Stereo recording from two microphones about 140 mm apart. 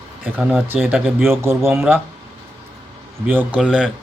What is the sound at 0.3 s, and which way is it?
Speech, 10° right (ahead or behind).